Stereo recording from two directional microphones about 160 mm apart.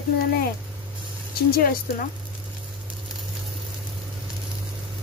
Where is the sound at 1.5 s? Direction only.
65° left (ahead or behind).